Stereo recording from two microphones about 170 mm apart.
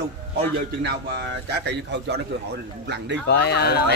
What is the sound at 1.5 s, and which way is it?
Speech, 80° right.